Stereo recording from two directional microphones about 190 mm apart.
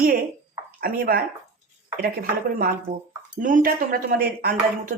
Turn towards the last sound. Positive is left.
turn(degrees=-50)  # may be behind; listen again after turning